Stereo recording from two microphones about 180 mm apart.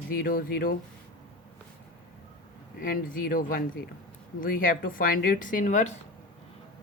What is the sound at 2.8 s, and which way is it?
Speech, 50° left (ahead or behind).